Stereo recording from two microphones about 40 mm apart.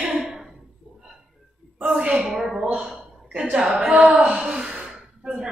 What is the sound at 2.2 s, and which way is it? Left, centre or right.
A woman's voice, centre.